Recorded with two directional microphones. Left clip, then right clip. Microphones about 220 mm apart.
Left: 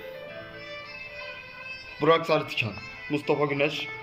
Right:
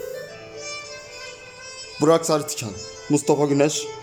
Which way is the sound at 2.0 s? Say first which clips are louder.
Right 4 dB; 15° right (ahead or behind).